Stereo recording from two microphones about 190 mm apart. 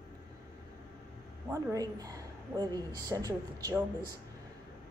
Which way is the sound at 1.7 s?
20° right (ahead or behind).